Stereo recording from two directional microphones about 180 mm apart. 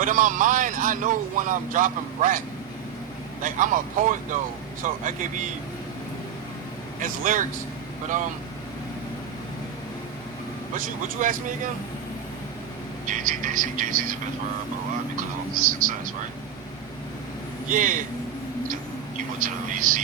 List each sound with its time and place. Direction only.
0.0 s speech: 45° right (ahead or behind)
3.4 s speech: 45° right (ahead or behind)
7.0 s speech: 45° right (ahead or behind)
10.8 s speech: 50° right (ahead or behind)
13.1 s speech: 45° right (ahead or behind)
15.6 s speech: 50° right (ahead or behind)
17.7 s speech: 45° right (ahead or behind)
19.4 s speech: 50° right (ahead or behind)